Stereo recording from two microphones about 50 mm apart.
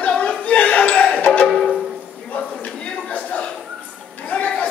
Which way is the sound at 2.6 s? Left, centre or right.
Left.